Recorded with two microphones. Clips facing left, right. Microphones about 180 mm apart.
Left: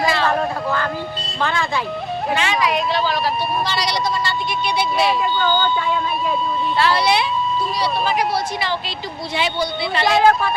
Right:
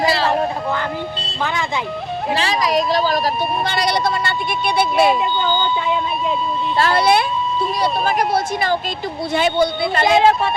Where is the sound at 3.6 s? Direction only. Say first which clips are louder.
Right 3 dB; 55° right (ahead or behind).